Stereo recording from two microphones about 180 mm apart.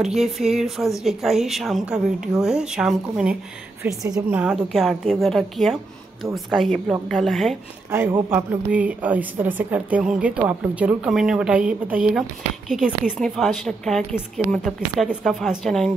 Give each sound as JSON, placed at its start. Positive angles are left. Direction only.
{"t": 0.0, "sound": "speech", "side_deg": 0}
{"t": 7.9, "sound": "a woman's voice", "side_deg": -10}